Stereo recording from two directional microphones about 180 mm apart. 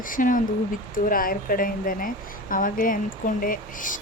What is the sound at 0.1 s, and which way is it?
A woman's voice, 50° left (ahead or behind).